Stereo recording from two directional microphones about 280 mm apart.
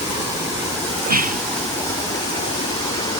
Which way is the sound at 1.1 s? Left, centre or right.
Right.